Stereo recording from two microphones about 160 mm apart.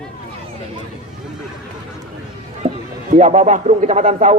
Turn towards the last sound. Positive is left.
turn(degrees=-55)  # may be behind; listen again after turning